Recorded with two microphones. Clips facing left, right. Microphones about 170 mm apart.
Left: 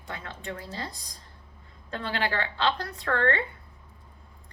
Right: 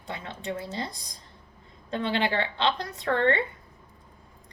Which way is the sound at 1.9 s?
20° right (ahead or behind).